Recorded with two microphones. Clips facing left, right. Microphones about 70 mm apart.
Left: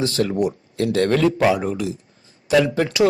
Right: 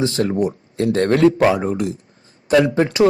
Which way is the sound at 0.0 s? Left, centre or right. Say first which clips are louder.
Right 2 dB; right.